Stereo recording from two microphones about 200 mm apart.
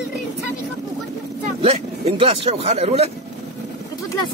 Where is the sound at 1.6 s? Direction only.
30° right (ahead or behind).